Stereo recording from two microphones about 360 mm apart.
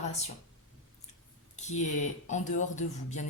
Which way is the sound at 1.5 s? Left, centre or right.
Centre.